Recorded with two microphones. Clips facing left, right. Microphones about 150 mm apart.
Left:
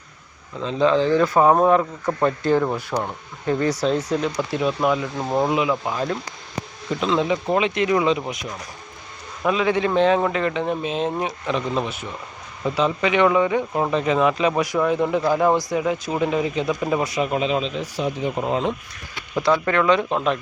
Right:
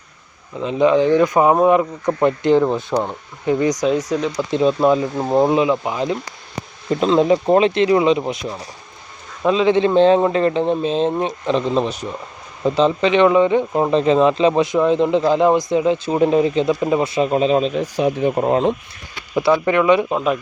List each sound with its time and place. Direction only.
0.6 s speech: 15° right (ahead or behind)
4.5 s speech: 30° right (ahead or behind)
6.9 s speech: 40° right (ahead or behind)
19.3 s speech: 10° right (ahead or behind)